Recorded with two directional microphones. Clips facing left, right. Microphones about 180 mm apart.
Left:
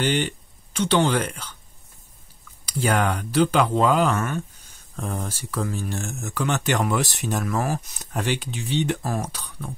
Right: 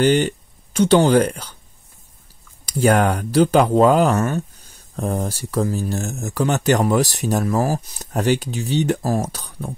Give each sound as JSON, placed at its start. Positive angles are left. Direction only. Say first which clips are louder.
{"t": 0.0, "sound": "speech", "louder": "right 7 dB", "side_deg": -45}
{"t": 2.6, "sound": "speech", "louder": "right 6 dB", "side_deg": -45}